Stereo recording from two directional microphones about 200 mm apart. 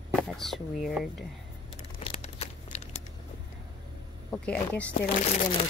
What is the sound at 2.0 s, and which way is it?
Crumpling, 30° left (ahead or behind).